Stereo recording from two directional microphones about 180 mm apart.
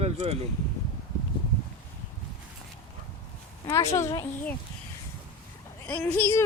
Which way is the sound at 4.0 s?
15° left (ahead or behind).